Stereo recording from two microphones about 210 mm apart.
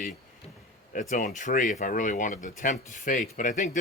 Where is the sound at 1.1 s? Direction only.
35° left (ahead or behind).